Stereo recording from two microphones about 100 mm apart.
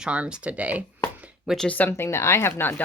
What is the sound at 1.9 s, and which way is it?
Speech, 25° left (ahead or behind).